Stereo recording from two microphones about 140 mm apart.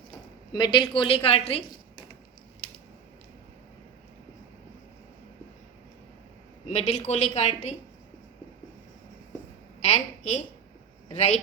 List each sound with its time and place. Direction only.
0.5 s a woman's voice: 35° left (ahead or behind)
6.7 s a woman's voice: 55° left (ahead or behind)
9.8 s a woman's voice: 50° left (ahead or behind)